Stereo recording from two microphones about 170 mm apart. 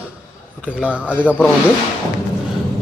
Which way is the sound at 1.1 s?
10° left (ahead or behind).